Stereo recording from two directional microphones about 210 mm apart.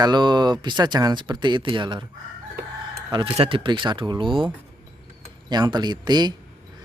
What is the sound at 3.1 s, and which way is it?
Speech, 25° right (ahead or behind).